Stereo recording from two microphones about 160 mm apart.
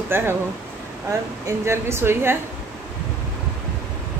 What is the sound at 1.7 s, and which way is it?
Speech, 15° right (ahead or behind).